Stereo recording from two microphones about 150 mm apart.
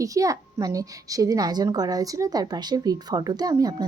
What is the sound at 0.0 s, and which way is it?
A child's voice, 20° right (ahead or behind).